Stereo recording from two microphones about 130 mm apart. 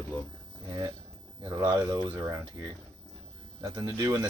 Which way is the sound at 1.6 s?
30° right (ahead or behind).